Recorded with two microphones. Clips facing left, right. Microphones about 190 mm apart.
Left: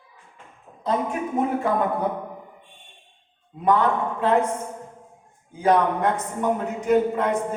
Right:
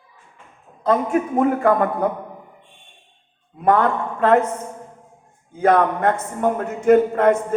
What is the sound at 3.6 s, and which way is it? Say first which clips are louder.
Speech: right 3 dB; 55° right (ahead or behind).